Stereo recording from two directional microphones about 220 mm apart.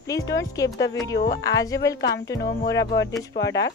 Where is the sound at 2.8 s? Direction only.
45° left (ahead or behind).